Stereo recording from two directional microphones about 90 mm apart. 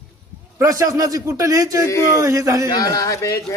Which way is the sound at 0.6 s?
40° right (ahead or behind).